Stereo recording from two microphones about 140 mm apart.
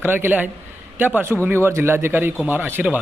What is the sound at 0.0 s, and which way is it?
Speech, 15° right (ahead or behind).